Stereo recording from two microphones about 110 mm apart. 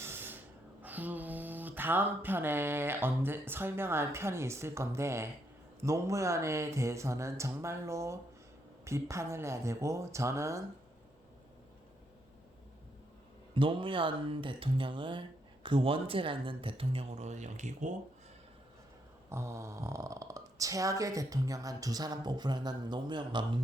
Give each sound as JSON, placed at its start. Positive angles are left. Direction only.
{"t": 0.0, "sound": "a sound", "side_deg": -20}
{"t": 5.8, "sound": "speech", "side_deg": -25}
{"t": 13.6, "sound": "speech", "side_deg": -50}
{"t": 19.3, "sound": "speech", "side_deg": -25}